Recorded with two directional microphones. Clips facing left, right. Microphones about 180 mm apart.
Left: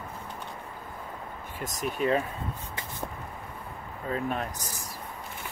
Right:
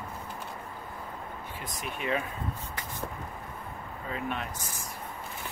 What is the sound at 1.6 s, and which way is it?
Speech, 40° left (ahead or behind).